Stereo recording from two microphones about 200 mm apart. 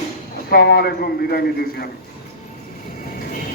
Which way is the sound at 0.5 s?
55° left (ahead or behind).